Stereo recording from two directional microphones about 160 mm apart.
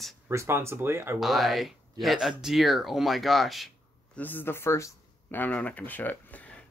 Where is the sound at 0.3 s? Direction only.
15° right (ahead or behind).